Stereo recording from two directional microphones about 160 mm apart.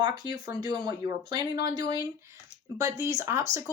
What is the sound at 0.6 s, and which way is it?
A woman's voice, 25° right (ahead or behind).